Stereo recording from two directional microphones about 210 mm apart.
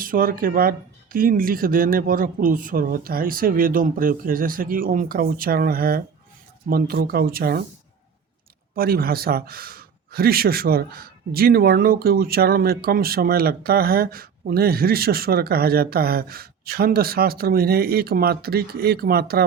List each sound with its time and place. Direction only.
0.0 s speech: 40° right (ahead or behind)
8.7 s speech: 45° right (ahead or behind)